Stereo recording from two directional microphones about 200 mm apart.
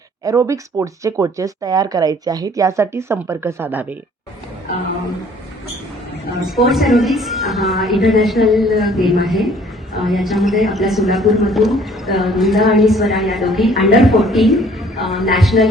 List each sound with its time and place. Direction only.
0.3 s speech: 15° right (ahead or behind)
6.4 s a woman's voice: centre (ahead or behind)